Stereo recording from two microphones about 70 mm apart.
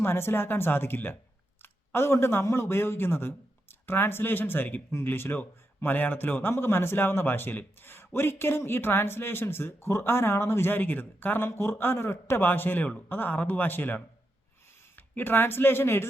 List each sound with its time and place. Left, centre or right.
0.0 s a man's voice: left